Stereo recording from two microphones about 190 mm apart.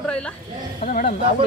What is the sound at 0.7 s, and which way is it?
Speech, 45° left (ahead or behind).